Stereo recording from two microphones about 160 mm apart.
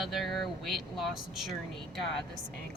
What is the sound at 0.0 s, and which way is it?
Speech, centre (ahead or behind).